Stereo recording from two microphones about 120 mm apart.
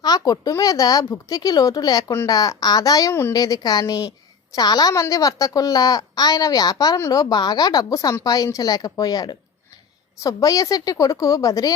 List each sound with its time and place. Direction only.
0.0 s a woman's voice: 30° left (ahead or behind)